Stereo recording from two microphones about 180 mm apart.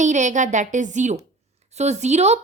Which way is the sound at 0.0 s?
40° right (ahead or behind).